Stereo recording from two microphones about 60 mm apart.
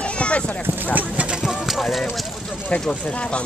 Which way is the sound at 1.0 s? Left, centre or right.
Centre.